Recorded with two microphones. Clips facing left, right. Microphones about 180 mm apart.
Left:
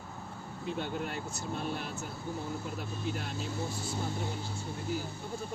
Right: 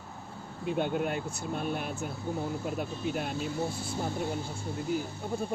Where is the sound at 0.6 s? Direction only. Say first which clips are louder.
Right 6 dB; 55° right (ahead or behind).